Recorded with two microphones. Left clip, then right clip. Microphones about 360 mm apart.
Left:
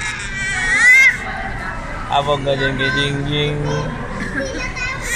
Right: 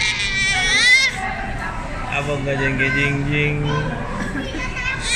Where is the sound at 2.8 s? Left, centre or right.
Centre.